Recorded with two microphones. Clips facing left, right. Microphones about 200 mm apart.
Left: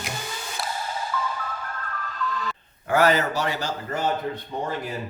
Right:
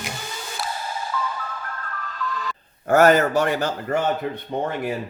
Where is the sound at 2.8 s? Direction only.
45° right (ahead or behind).